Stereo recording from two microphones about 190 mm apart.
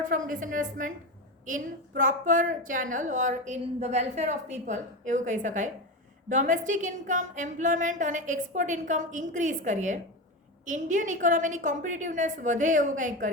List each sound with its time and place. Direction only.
0.0 s a woman's voice: 45° right (ahead or behind)
2.0 s a woman's voice: 45° right (ahead or behind)